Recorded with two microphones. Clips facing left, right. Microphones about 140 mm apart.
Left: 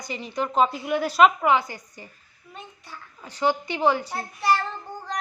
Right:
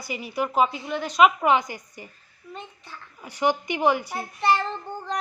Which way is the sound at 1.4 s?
15° right (ahead or behind).